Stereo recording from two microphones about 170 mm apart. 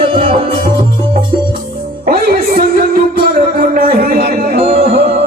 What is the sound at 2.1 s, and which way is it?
Music, 55° right (ahead or behind).